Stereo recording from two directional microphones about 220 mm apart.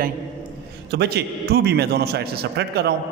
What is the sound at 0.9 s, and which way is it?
A man's voice, 45° right (ahead or behind).